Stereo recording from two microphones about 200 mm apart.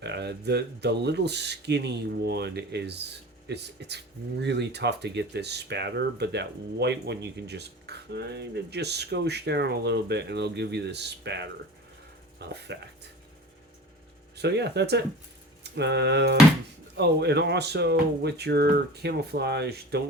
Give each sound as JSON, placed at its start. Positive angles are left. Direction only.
{"t": 0.0, "sound": "speech", "side_deg": -60}
{"t": 14.3, "sound": "speech", "side_deg": -55}